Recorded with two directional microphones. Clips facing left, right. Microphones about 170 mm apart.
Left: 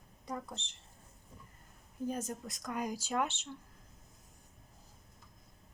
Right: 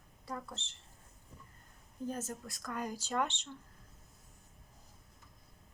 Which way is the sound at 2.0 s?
15° left (ahead or behind).